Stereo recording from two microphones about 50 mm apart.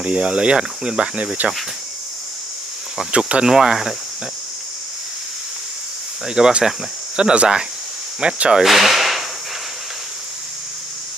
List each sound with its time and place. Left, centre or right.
0.0 s speech: right
3.1 s speech: right
3.4 s speech: centre
6.2 s speech: centre
8.6 s speech: centre